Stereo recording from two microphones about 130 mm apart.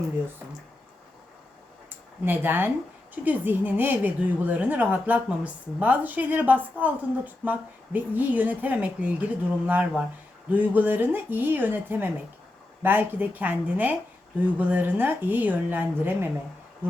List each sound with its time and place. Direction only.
2.2 s a woman's voice: 15° right (ahead or behind)